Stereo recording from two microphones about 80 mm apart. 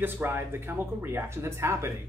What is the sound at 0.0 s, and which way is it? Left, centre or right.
Speech, right.